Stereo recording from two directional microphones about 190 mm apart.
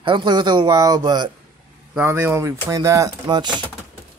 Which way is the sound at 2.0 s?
10° right (ahead or behind).